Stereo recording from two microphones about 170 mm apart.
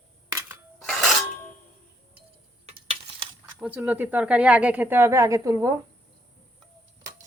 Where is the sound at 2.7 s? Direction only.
30° right (ahead or behind).